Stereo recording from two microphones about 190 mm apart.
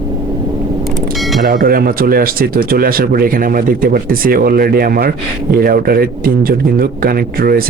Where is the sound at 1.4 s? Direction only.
50° right (ahead or behind).